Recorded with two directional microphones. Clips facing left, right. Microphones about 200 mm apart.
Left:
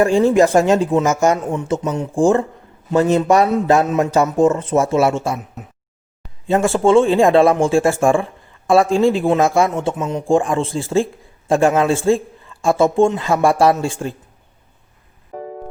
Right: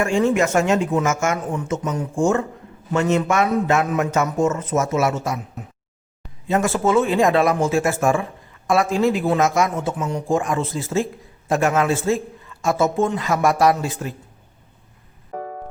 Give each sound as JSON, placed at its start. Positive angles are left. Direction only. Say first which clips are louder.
{"t": 0.0, "sound": "a man's voice", "louder": "left 5 dB", "side_deg": 35}
{"t": 6.5, "sound": "a man's voice", "louder": "left 5 dB", "side_deg": 30}